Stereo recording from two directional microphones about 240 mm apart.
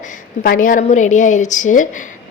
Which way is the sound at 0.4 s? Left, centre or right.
Left.